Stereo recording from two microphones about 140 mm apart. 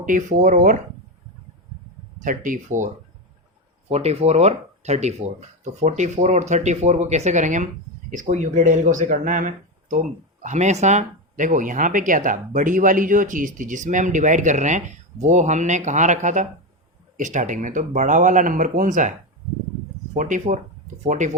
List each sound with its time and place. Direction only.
0.0 s speech: 65° right (ahead or behind)
2.2 s speech: 70° right (ahead or behind)
3.8 s speech: 50° right (ahead or behind); by 19.1 s 65° right (ahead or behind)
20.1 s speech: 65° right (ahead or behind)